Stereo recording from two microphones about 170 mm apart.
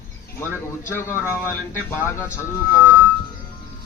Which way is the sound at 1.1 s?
10° right (ahead or behind).